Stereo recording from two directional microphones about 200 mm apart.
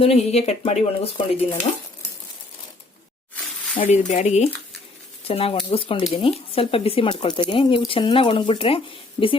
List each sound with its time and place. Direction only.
0.0 s speech: 30° left (ahead or behind)
3.8 s speech: 40° left (ahead or behind)